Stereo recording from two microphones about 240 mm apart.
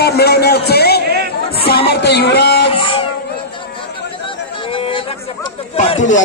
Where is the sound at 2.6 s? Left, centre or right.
Left.